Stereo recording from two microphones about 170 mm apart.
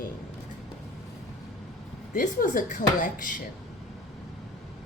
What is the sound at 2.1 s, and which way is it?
Speech, 50° left (ahead or behind).